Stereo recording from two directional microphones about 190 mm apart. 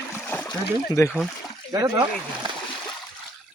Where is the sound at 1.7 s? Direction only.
15° right (ahead or behind).